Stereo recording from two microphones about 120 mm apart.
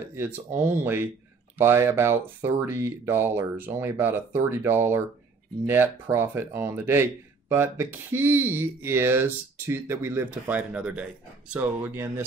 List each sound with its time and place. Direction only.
0.6 s speech: 20° right (ahead or behind)